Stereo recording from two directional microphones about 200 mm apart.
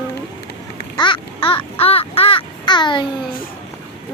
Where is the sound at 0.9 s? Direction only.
25° left (ahead or behind).